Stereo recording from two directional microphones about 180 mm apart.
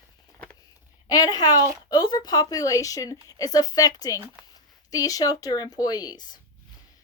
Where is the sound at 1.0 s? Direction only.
20° left (ahead or behind).